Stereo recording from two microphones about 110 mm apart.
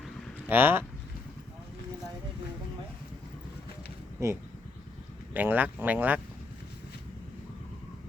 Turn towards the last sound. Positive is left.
turn(degrees=-15)  # may be behind; listen again after turning